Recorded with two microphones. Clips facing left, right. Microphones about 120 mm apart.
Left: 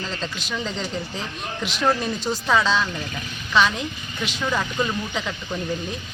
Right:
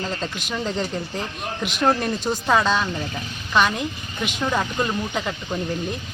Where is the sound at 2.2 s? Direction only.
15° right (ahead or behind).